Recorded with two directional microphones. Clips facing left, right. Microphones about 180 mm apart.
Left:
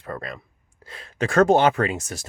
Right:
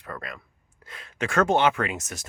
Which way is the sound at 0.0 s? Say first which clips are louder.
Left 5 dB; 35° left (ahead or behind).